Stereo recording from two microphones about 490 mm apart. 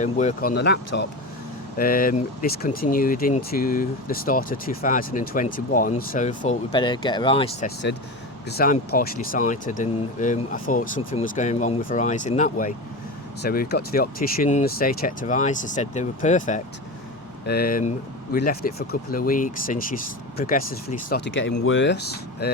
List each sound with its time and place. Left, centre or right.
0.0 s speech: centre
1.8 s speech: centre